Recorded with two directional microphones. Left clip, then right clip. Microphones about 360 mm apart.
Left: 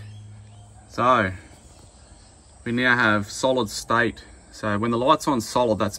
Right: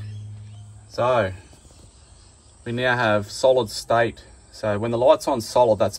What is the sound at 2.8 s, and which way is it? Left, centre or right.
Speech, left.